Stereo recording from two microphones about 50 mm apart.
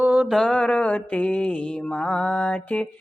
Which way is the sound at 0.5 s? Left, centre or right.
Centre.